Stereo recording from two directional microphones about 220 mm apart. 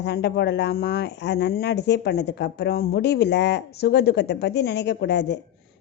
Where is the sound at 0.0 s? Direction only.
50° left (ahead or behind).